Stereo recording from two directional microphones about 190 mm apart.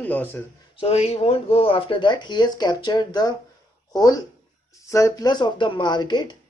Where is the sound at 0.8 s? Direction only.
30° left (ahead or behind).